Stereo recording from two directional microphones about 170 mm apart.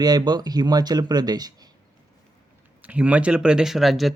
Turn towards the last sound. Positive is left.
turn(degrees=0)  # may be behind; listen again after turning